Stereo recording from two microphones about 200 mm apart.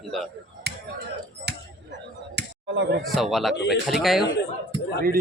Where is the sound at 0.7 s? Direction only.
55° right (ahead or behind).